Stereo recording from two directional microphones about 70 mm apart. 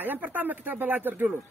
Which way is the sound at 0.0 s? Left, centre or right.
Right.